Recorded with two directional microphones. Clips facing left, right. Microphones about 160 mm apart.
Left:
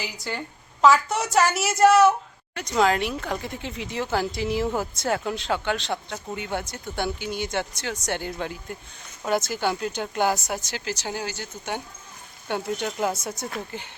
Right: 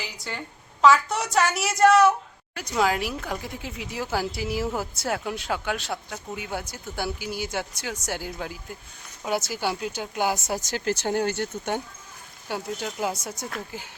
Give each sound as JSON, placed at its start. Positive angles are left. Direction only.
{"t": 0.0, "sound": "a woman's voice", "side_deg": 0}
{"t": 10.5, "sound": "speech", "side_deg": -45}
{"t": 12.5, "sound": "a woman's voice", "side_deg": -5}